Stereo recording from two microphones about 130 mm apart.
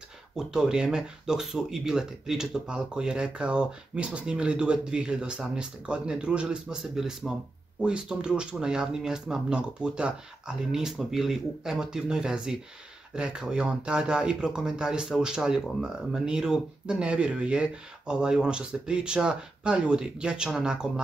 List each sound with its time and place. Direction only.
0.4 s speech: 5° right (ahead or behind)